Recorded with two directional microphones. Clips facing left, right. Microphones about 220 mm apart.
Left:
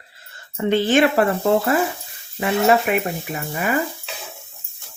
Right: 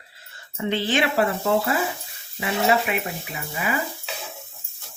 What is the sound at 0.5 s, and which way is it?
Speech, 50° left (ahead or behind).